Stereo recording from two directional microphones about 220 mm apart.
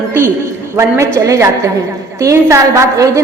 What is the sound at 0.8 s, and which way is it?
A woman's voice, 15° right (ahead or behind).